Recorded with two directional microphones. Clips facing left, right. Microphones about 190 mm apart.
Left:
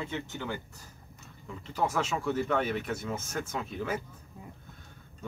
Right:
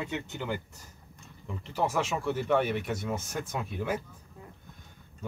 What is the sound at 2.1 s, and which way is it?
Speech, 10° right (ahead or behind).